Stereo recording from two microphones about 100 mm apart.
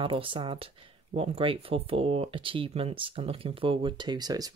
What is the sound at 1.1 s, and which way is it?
Speech, 75° right (ahead or behind).